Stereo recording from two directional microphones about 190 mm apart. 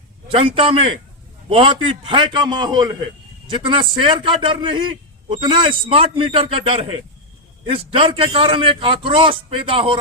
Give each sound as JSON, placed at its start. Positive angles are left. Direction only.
{"t": 0.3, "sound": "a man's voice", "side_deg": -30}